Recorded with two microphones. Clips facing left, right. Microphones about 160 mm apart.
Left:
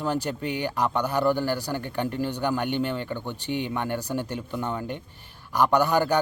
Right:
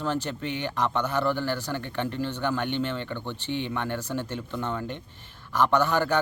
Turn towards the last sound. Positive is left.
turn(degrees=15)  # may be behind; listen again after turning